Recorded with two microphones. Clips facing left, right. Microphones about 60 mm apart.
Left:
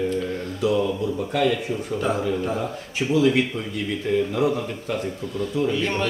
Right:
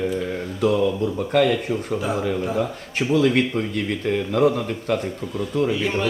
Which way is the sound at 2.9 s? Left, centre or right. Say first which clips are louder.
Even; right.